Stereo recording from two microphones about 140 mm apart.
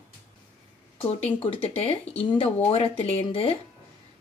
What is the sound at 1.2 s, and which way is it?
Speech, 45° left (ahead or behind).